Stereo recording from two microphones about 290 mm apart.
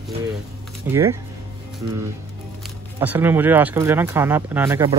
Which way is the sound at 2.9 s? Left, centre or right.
Centre.